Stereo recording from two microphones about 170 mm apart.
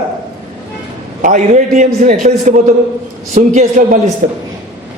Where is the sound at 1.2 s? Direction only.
45° right (ahead or behind).